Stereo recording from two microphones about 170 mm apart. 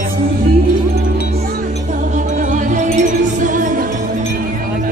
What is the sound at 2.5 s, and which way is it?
Music, 50° right (ahead or behind).